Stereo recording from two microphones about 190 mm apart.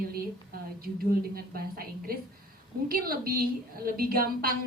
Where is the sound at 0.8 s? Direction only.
50° right (ahead or behind).